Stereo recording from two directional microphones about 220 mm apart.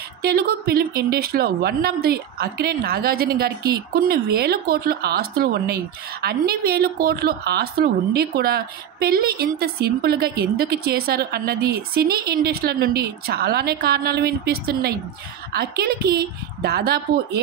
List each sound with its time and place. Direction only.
0.2 s a woman's voice: 45° right (ahead or behind)